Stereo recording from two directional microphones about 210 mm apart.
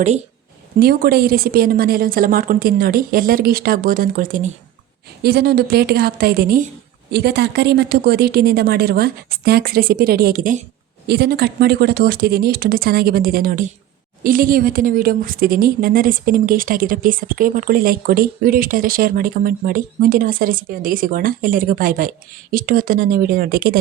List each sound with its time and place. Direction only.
0.8 s a woman's voice: 45° right (ahead or behind)